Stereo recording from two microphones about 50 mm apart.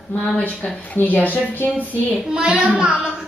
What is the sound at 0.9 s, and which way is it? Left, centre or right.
Speech, left.